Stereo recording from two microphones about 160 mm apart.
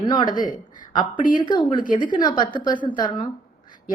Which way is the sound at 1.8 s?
55° left (ahead or behind).